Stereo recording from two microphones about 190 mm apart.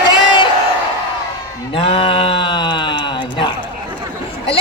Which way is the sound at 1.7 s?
30° left (ahead or behind).